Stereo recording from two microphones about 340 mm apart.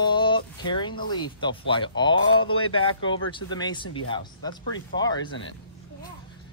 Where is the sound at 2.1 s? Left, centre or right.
Left.